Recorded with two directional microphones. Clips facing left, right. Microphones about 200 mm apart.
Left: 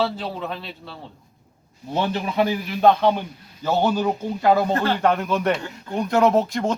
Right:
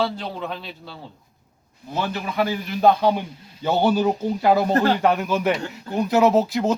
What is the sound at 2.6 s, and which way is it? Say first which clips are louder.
Speech: even; 5° right (ahead or behind).